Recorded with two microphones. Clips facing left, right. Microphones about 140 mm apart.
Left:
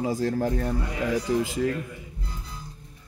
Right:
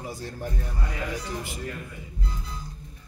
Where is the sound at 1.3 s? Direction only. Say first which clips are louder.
Left 10 dB; 90° left.